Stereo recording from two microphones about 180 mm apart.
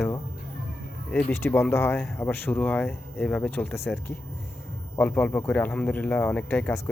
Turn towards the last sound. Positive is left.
turn(degrees=5)  # may be behind; listen again after turning